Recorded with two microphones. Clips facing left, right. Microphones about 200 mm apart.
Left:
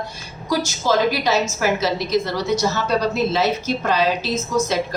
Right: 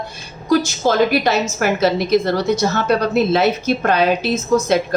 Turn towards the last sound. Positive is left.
turn(degrees=-55)  # may be behind; listen again after turning